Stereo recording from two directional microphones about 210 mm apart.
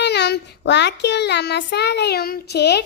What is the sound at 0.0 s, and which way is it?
Child singing, 50° left (ahead or behind).